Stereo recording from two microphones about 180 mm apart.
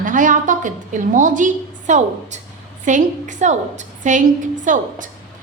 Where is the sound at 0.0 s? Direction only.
45° right (ahead or behind).